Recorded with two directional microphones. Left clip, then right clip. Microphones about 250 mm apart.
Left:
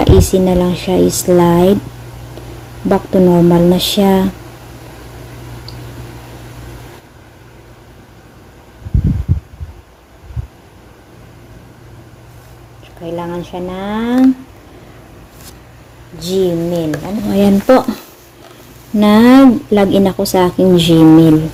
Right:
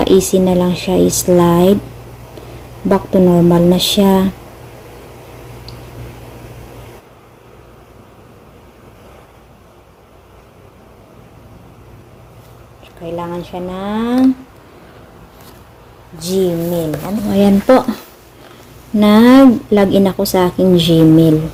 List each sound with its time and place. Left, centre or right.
0.0 s speech: centre
2.9 s speech: centre
13.1 s a sound: centre
16.1 s speech: centre